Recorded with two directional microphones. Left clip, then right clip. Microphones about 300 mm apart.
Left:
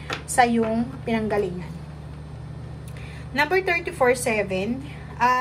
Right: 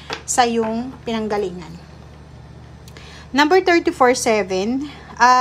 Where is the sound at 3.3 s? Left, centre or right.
Centre.